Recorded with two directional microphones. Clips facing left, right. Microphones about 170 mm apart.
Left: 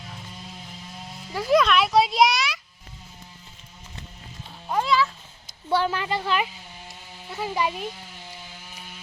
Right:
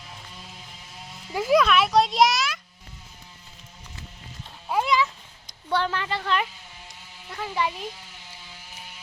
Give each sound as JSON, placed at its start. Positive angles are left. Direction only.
{"t": 1.3, "sound": "speech", "side_deg": -15}
{"t": 1.5, "sound": "a child's voice", "side_deg": 0}
{"t": 4.7, "sound": "a sound", "side_deg": -15}
{"t": 5.6, "sound": "a woman's voice", "side_deg": 10}